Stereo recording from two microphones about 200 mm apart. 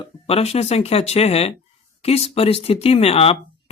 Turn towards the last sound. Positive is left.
turn(degrees=30)  # may be behind; listen again after turning